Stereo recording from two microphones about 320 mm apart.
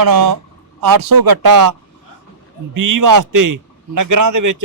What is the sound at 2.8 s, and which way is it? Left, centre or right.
A man's voice, right.